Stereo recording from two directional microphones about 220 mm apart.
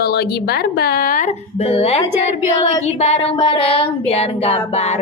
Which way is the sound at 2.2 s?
30° left (ahead or behind).